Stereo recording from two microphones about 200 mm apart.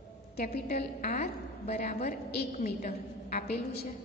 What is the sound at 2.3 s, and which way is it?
A woman's voice, 50° left (ahead or behind).